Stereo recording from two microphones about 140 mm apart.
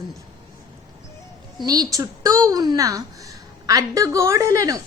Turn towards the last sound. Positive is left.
turn(degrees=-25)  # may be behind; listen again after turning